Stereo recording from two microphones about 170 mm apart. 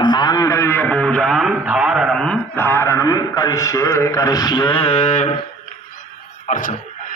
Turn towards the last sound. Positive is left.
turn(degrees=45)  # may be behind; listen again after turning